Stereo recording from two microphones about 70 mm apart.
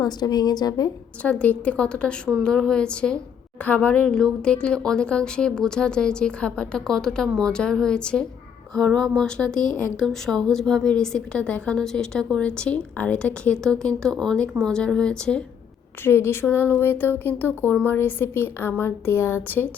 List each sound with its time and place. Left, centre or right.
0.0 s speech: left
1.2 s speech: left
16.0 s a woman's voice: left